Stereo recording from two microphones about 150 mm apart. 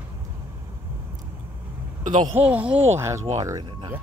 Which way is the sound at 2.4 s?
10° right (ahead or behind).